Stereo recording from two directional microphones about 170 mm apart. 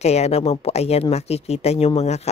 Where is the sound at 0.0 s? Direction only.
40° left (ahead or behind).